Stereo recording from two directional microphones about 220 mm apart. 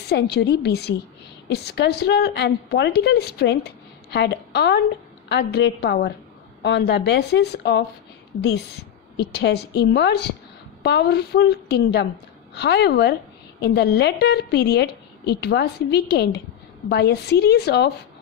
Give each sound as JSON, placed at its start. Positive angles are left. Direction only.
{"t": 0.0, "sound": "a woman's voice", "side_deg": 50}